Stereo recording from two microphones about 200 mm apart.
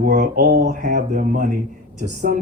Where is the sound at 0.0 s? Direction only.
40° right (ahead or behind).